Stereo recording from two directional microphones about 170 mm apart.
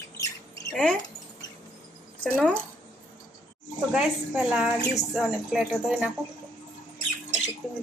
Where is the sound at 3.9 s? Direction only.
5° right (ahead or behind).